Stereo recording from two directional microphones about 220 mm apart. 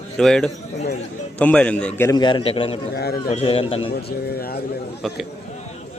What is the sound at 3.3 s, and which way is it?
Speech, 25° left (ahead or behind).